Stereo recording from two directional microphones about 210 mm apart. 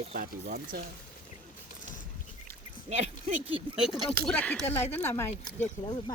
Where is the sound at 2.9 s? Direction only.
30° right (ahead or behind).